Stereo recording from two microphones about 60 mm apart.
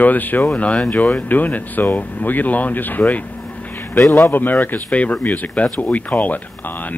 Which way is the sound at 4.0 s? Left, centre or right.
Left.